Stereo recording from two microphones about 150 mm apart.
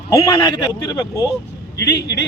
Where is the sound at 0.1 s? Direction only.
30° left (ahead or behind).